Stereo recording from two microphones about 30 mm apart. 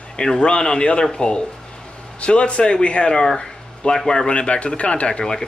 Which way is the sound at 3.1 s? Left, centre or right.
Left.